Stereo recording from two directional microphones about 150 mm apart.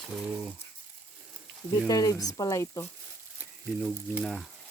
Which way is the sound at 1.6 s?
25° left (ahead or behind).